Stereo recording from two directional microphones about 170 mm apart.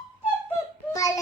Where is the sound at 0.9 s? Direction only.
20° left (ahead or behind).